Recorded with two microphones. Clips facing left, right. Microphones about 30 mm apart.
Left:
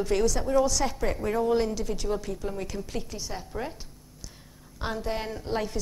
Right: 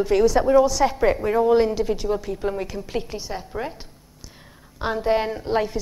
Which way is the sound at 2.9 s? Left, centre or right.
Right.